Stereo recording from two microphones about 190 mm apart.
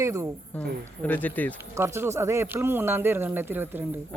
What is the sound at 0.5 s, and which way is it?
Speech, 10° left (ahead or behind).